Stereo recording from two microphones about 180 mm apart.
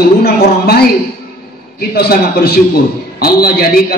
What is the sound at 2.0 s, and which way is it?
A man's voice, 60° left (ahead or behind).